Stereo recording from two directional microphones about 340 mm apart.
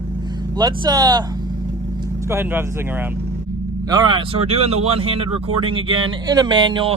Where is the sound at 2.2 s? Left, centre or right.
Centre.